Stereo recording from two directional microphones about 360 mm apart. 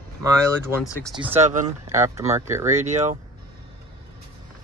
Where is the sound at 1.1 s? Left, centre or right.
Centre.